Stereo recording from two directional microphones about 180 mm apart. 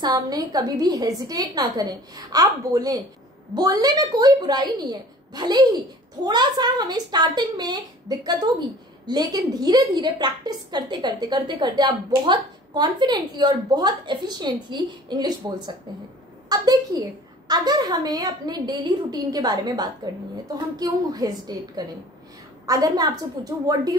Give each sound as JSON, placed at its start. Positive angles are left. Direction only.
{"t": 0.0, "sound": "a woman's voice", "side_deg": -20}